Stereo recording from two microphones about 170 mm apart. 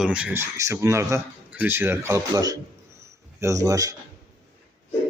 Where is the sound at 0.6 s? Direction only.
20° right (ahead or behind).